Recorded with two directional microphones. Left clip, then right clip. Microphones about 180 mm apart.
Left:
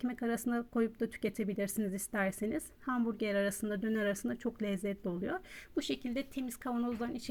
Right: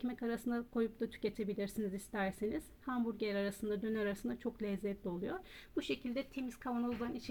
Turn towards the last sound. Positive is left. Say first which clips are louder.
# left 3 dB
turn(degrees=30)  # may be behind; listen again after turning